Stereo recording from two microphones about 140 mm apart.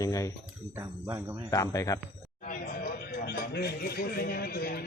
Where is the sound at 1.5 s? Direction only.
25° left (ahead or behind).